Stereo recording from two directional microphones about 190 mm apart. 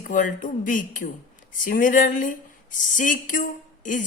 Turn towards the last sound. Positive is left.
turn(degrees=45)  # may be behind; listen again after turning